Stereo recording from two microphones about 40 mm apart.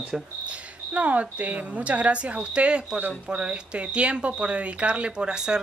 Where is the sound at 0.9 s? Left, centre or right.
Right.